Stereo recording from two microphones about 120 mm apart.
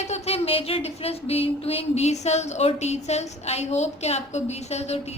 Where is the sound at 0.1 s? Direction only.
60° left (ahead or behind).